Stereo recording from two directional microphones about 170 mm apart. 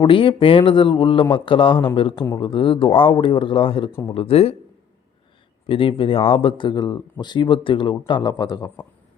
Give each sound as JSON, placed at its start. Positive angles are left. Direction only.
{"t": 0.0, "sound": "a man's voice", "side_deg": 30}
{"t": 5.6, "sound": "speech", "side_deg": 30}